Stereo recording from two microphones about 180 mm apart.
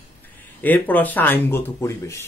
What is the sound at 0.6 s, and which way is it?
Speech, 10° left (ahead or behind).